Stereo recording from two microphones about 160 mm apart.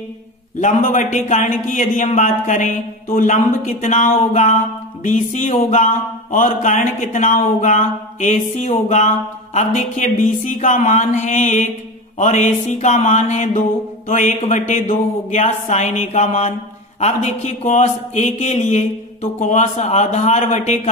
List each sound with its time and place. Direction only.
0.6 s speech: 50° left (ahead or behind)